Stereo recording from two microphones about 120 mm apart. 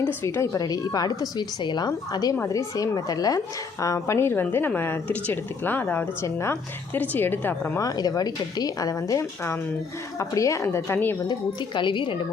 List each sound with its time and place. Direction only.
0.2 s a woman's voice: 20° left (ahead or behind)
7.8 s a woman's voice: 30° left (ahead or behind)
11.3 s speech: 40° left (ahead or behind)